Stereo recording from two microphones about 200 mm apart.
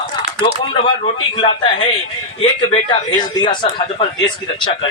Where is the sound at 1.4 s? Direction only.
25° left (ahead or behind).